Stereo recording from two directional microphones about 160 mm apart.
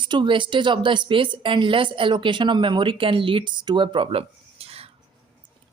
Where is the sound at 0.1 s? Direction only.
30° right (ahead or behind).